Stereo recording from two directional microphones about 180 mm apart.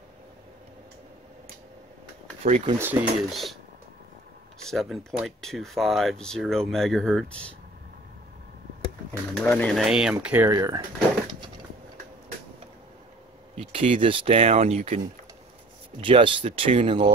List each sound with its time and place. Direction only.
2.4 s speech: 35° right (ahead or behind)
2.8 s speech: 10° right (ahead or behind)
4.6 s speech: centre (ahead or behind)
9.3 s speech: 5° left (ahead or behind); by 10.9 s 20° right (ahead or behind)
13.6 s speech: 30° right (ahead or behind)